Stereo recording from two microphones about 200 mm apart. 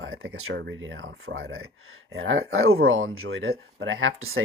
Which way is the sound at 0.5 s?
65° right (ahead or behind).